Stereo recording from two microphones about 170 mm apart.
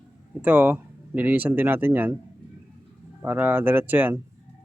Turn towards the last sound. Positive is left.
turn(degrees=-10)  # may be behind; listen again after turning